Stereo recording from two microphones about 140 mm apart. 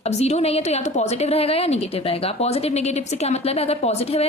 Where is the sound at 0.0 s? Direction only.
50° left (ahead or behind).